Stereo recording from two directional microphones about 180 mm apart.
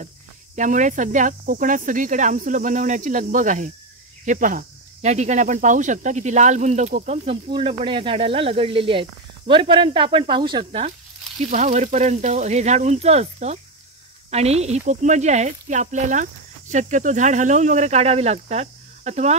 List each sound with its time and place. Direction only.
0.6 s speech: 45° right (ahead or behind)
7.2 s speech: 30° right (ahead or behind)
11.5 s speech: 40° right (ahead or behind)